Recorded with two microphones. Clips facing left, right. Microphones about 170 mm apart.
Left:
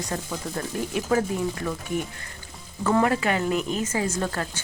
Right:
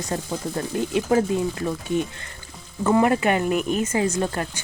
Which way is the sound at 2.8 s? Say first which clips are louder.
Right 3 dB; 15° right (ahead or behind).